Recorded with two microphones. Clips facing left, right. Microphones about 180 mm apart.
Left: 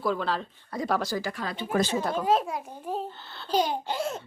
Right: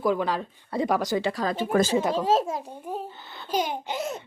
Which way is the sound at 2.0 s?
20° right (ahead or behind).